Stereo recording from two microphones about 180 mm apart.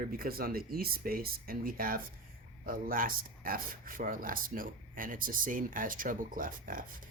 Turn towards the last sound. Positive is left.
turn(degrees=-50)  # may be behind; listen again after turning